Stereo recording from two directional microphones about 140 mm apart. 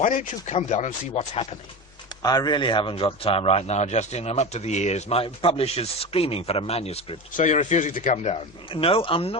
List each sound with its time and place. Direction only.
0.0 s speech: 65° left (ahead or behind); by 1.5 s 50° left (ahead or behind)
2.2 s a man's voice: 25° left (ahead or behind); by 7.2 s 45° left (ahead or behind)
7.3 s speech: 60° left (ahead or behind)
8.7 s speech: 40° left (ahead or behind)